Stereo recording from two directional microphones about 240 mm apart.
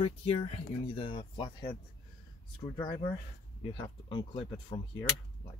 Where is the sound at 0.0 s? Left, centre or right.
Left.